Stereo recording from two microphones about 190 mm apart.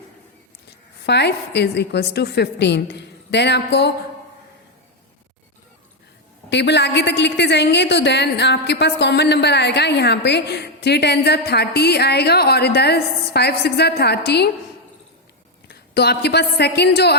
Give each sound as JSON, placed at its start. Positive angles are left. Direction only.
{"t": 1.0, "sound": "a woman's voice", "side_deg": 60}
{"t": 6.5, "sound": "a woman's voice", "side_deg": 65}
{"t": 15.6, "sound": "a woman's voice", "side_deg": 60}